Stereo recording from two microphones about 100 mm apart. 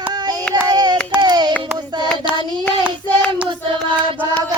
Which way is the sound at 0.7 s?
45° right (ahead or behind).